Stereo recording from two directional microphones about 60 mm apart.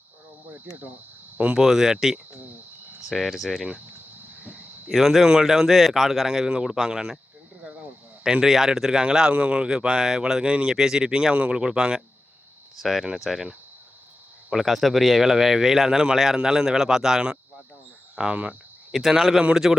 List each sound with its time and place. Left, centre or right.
1.5 s speech: centre
4.9 s speech: centre
7.6 s a sound: right
8.2 s speech: centre
14.5 s speech: centre
18.2 s cricket: centre
19.6 s speech: centre